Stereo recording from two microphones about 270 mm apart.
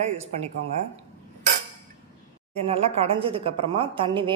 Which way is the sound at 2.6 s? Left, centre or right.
Right.